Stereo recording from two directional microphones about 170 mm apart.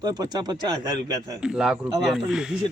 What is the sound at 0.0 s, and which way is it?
Speech, 25° right (ahead or behind).